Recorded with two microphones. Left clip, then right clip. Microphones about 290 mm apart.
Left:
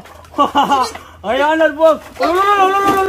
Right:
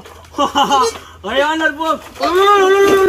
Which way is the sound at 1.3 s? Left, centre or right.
Centre.